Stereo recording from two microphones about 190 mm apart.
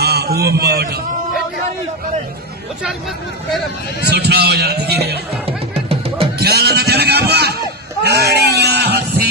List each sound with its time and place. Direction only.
0.0 s a man's voice: 55° right (ahead or behind)
4.1 s a man's voice: 55° right (ahead or behind)
5.5 s music: 30° right (ahead or behind)
6.4 s speech: 60° right (ahead or behind)
8.0 s sheep: 60° right (ahead or behind)